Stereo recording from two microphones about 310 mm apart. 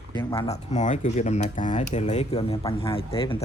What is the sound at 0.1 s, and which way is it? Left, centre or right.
Speech, centre.